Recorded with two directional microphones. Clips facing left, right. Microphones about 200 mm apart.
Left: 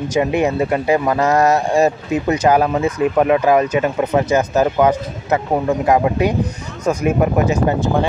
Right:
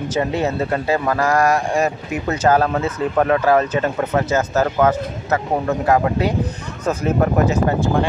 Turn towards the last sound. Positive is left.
turn(degrees=15)  # may be behind; listen again after turning